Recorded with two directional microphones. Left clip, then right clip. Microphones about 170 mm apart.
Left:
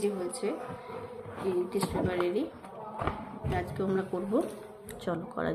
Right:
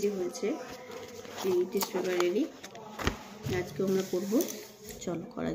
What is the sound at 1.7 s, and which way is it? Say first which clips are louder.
Speech: even; 30° right (ahead or behind).